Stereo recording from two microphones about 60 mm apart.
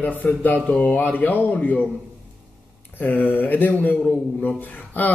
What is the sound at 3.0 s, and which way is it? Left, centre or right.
Speech, left.